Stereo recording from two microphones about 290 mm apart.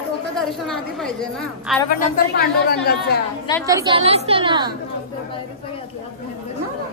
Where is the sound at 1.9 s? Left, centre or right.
Left.